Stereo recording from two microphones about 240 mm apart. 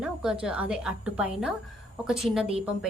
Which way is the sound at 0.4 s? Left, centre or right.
Centre.